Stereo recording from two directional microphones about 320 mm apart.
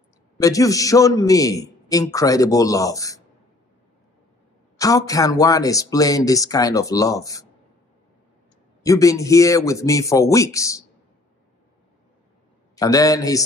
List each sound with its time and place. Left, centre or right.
0.4 s a man's voice: centre
4.7 s a man's voice: centre
8.8 s a man's voice: centre
12.7 s a man's voice: centre